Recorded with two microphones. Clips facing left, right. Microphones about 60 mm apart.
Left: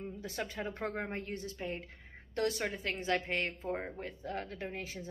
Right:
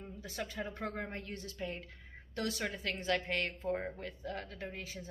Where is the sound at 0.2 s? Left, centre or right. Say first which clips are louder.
Even; left.